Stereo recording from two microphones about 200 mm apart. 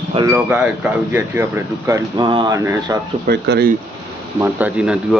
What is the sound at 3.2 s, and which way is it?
Speech, 55° right (ahead or behind).